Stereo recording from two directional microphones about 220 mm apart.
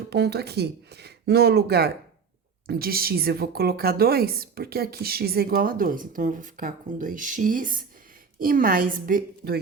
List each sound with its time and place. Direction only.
0.1 s a woman's voice: 45° right (ahead or behind)